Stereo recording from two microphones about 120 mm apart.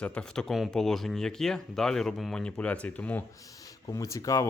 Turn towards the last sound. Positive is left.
turn(degrees=30)  # may be behind; listen again after turning